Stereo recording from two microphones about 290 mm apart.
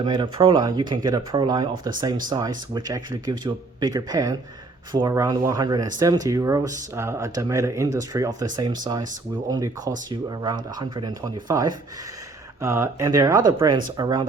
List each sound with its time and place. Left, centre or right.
0.0 s speech: centre